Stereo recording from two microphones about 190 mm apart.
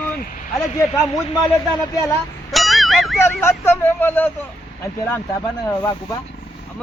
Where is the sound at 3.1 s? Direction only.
15° left (ahead or behind).